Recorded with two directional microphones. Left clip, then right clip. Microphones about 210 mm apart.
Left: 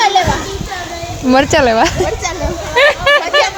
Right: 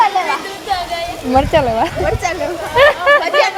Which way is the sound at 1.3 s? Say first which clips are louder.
Left 3 dB; 25° left (ahead or behind).